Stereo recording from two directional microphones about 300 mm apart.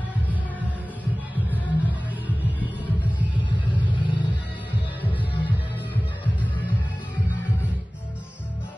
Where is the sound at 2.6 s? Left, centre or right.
Centre.